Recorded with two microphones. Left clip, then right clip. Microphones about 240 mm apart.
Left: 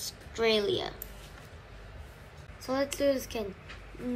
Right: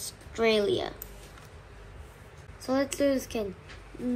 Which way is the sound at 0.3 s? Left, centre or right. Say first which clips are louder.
Right 2 dB; centre.